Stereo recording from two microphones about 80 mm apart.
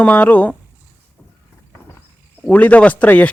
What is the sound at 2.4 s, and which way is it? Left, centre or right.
Speech, centre.